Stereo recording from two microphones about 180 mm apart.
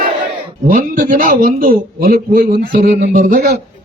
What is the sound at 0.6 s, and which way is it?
A man's voice, 50° right (ahead or behind).